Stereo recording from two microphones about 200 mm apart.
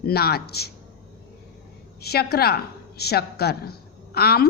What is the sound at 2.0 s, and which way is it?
A woman's voice, 50° left (ahead or behind).